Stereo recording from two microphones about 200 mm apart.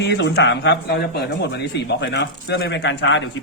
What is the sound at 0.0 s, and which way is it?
Speech, 60° left (ahead or behind).